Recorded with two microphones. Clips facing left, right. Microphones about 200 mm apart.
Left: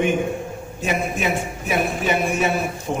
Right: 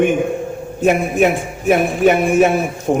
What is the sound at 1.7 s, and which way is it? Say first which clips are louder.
Speech: right 9 dB; 55° right (ahead or behind).